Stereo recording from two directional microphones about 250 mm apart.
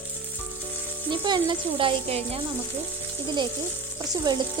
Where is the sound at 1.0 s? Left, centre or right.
Centre.